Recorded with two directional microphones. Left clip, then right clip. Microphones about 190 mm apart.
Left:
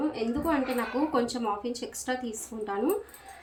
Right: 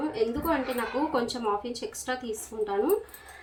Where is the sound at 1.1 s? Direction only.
15° left (ahead or behind).